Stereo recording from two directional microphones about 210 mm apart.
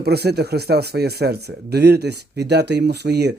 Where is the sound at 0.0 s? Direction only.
50° right (ahead or behind).